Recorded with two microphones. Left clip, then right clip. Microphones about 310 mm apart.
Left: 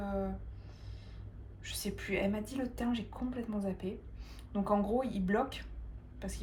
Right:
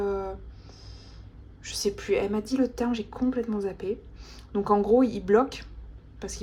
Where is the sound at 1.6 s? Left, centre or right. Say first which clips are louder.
Right 11 dB; right.